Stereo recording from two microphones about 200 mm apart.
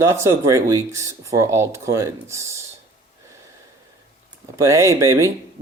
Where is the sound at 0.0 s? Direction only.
15° right (ahead or behind).